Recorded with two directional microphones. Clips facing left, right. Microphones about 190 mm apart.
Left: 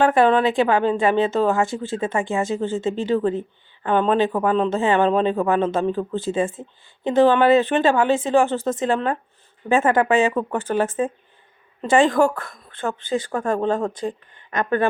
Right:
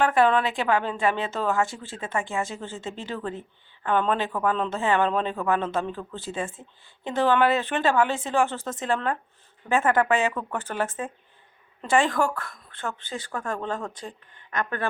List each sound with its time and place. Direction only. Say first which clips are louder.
0.0 s a woman's voice: left 5 dB; 25° left (ahead or behind)